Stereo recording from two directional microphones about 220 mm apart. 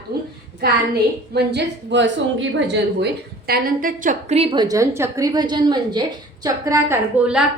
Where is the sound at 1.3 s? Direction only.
50° right (ahead or behind).